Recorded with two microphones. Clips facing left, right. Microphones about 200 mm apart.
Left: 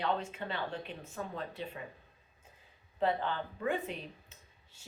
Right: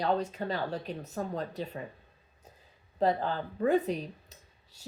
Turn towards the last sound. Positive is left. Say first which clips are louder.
# right 3 dB
turn(degrees=-40)  # may be behind; listen again after turning